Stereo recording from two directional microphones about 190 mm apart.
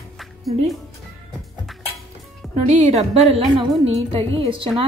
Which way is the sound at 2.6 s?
35° right (ahead or behind).